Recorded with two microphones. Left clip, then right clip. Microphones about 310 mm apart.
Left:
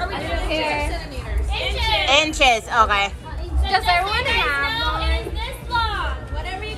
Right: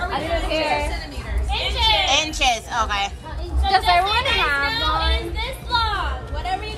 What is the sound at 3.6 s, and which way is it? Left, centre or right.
Speech, right.